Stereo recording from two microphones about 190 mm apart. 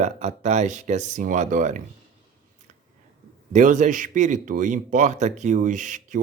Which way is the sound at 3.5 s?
40° right (ahead or behind).